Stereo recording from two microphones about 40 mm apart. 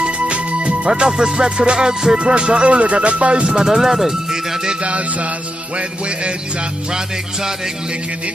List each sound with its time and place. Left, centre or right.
0.0 s music: right
0.8 s music: centre
3.5 s speech: centre
4.8 s music: right